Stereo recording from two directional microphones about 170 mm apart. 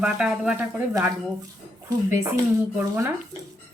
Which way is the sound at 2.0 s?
15° right (ahead or behind).